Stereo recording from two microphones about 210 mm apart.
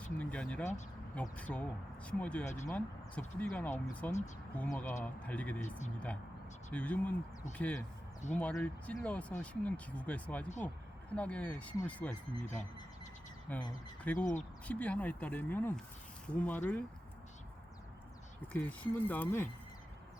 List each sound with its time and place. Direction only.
0.2 s speech: 5° left (ahead or behind)
2.4 s speech: 35° left (ahead or behind)
2.6 s speech: 5° left (ahead or behind)
6.7 s speech: 5° left (ahead or behind)
18.5 s speech: 10° left (ahead or behind)